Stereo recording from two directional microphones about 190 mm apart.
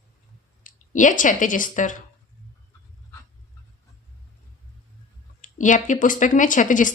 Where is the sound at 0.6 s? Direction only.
40° left (ahead or behind).